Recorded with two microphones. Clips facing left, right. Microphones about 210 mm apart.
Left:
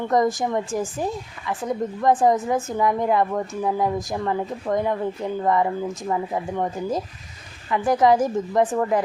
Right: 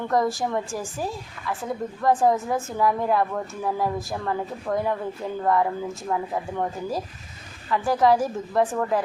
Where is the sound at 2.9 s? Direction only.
15° left (ahead or behind).